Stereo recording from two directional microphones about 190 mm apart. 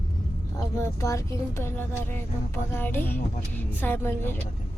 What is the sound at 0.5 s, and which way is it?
Speech, 15° left (ahead or behind).